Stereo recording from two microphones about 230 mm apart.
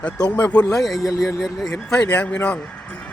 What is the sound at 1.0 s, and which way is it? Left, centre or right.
Speech, centre.